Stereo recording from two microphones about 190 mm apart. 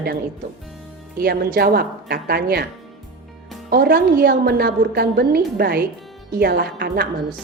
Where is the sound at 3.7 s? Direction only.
55° right (ahead or behind).